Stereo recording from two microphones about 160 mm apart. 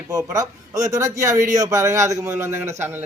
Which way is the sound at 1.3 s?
50° right (ahead or behind).